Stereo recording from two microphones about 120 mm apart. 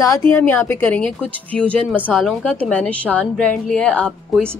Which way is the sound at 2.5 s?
10° left (ahead or behind).